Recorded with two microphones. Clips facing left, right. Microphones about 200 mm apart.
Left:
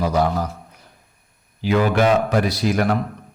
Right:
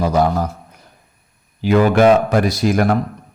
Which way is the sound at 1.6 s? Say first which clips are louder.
Right 5 dB; 50° right (ahead or behind).